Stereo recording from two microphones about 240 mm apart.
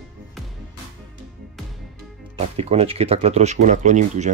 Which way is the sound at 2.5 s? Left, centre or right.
Right.